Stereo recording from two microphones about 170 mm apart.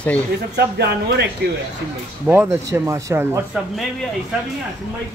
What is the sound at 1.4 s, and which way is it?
Speech, 75° right (ahead or behind).